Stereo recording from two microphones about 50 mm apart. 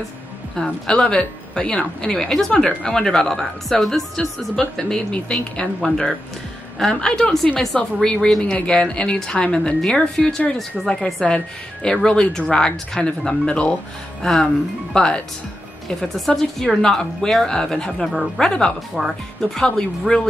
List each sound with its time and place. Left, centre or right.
0.6 s speech: centre
5.1 s speech: centre
13.5 s speech: left
18.0 s speech: centre
18.4 s speech: centre
19.0 s speech: centre
19.5 s speech: centre